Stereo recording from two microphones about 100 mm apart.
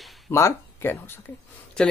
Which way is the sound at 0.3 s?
25° left (ahead or behind).